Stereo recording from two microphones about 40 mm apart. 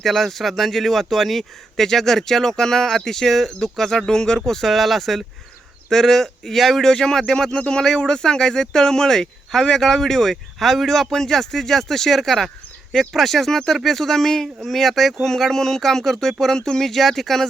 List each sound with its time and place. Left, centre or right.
0.0 s speech: centre
6.8 s speech: centre